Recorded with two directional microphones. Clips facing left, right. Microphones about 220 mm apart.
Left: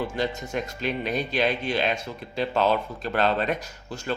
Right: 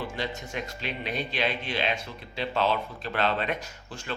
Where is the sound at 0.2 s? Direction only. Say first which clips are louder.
Left 5 dB; 45° left (ahead or behind).